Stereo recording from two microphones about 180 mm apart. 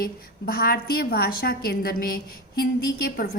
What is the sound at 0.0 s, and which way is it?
A woman's voice, 55° left (ahead or behind).